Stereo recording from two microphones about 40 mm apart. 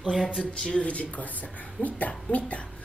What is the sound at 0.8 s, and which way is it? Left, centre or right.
A woman's voice, left.